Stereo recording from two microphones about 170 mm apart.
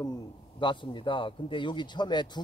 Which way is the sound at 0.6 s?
30° left (ahead or behind).